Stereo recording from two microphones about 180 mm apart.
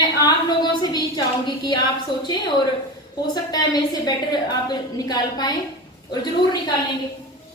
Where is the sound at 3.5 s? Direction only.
25° left (ahead or behind).